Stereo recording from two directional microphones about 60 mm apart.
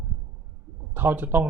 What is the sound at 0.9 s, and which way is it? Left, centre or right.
Speech, right.